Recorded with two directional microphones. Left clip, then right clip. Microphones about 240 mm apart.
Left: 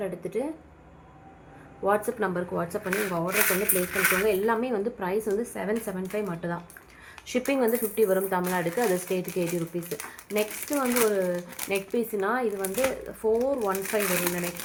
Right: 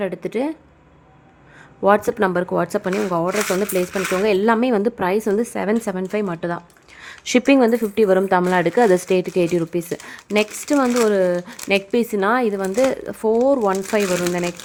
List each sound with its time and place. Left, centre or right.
0.0 s speech: right
1.8 s speech: right